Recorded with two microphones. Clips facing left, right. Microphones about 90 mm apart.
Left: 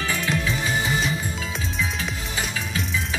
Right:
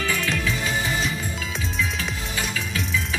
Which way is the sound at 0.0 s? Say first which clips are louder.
Even; 25° left (ahead or behind).